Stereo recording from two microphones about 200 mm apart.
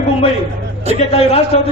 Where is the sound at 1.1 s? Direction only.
30° left (ahead or behind).